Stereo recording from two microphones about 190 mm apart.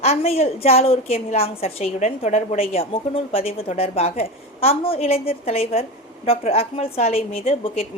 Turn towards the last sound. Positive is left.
turn(degrees=30)  # may be behind; listen again after turning